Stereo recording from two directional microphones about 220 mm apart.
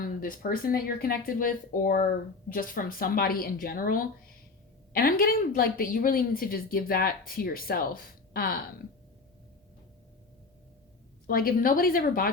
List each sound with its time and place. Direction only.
0.0 s a woman's voice: 40° left (ahead or behind)
11.3 s a woman's voice: 40° left (ahead or behind)